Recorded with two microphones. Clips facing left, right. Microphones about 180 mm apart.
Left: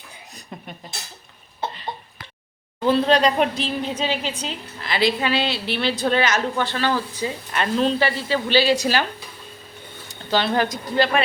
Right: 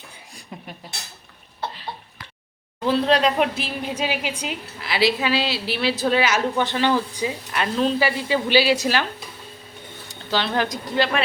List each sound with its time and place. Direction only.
2.8 s a woman's voice: centre (ahead or behind)
10.3 s a woman's voice: 5° left (ahead or behind)